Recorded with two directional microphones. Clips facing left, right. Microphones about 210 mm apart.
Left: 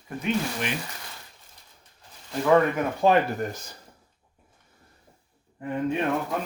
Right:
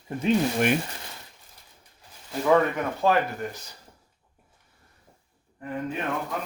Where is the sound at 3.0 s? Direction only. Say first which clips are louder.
Left 3 dB; 15° left (ahead or behind).